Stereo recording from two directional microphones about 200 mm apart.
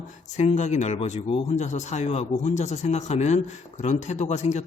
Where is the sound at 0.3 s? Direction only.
35° left (ahead or behind).